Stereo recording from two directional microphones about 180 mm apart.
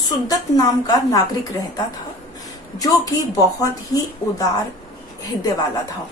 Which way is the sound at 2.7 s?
20° left (ahead or behind).